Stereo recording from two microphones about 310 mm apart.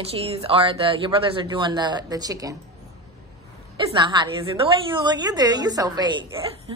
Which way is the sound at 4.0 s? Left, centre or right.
Centre.